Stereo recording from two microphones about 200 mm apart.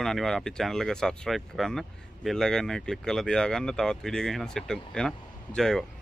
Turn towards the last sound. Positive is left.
turn(degrees=5)  # may be behind; listen again after turning